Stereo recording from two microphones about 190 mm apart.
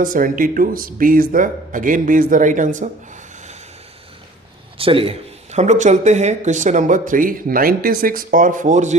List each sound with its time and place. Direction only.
0.0 s speech: 45° right (ahead or behind)
4.8 s speech: 30° right (ahead or behind)